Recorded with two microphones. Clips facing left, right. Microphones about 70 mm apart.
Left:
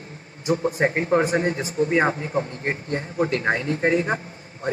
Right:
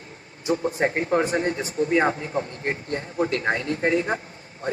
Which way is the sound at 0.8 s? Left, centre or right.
Left.